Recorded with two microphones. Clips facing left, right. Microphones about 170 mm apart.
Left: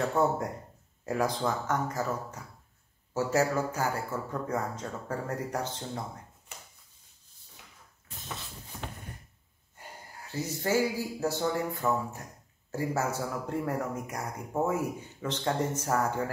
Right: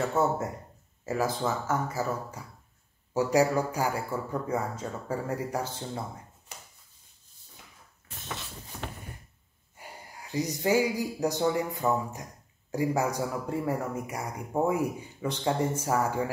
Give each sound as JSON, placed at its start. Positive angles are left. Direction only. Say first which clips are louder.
{"t": 0.0, "sound": "speech", "louder": "even", "side_deg": -5}
{"t": 8.7, "sound": "a sound", "louder": "right 2 dB", "side_deg": -70}
{"t": 9.8, "sound": "speech", "louder": "right 1 dB", "side_deg": -10}